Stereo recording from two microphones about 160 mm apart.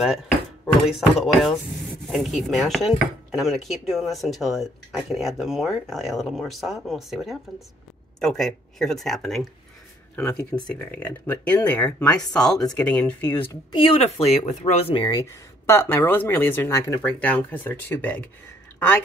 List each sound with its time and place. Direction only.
0.8 s speech: centre (ahead or behind)
13.5 s speech: 30° left (ahead or behind)
15.7 s speech: 15° left (ahead or behind)